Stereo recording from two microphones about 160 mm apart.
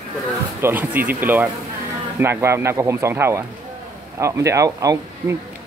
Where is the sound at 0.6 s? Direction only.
15° right (ahead or behind).